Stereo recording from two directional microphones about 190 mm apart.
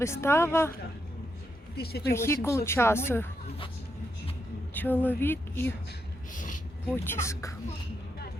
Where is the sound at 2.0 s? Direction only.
15° left (ahead or behind).